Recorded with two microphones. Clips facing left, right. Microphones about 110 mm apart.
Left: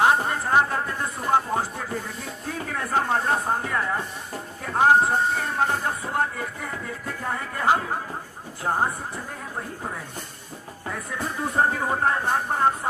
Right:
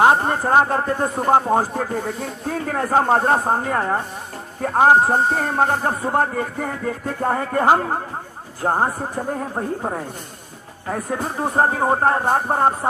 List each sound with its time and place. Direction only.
0.0 s speech: 40° right (ahead or behind)